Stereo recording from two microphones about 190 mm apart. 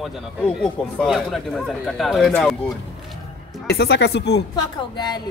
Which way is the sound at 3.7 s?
60° left (ahead or behind).